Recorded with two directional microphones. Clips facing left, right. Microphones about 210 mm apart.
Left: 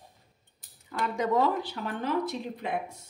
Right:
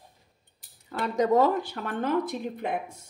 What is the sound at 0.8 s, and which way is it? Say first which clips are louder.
Speech: right 4 dB; 40° right (ahead or behind).